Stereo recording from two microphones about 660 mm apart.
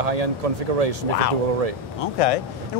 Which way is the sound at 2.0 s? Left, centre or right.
Left.